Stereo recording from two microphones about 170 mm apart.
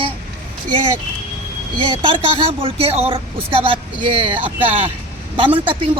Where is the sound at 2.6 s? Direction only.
35° right (ahead or behind).